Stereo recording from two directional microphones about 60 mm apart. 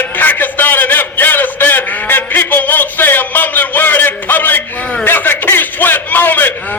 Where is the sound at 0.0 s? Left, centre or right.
Left.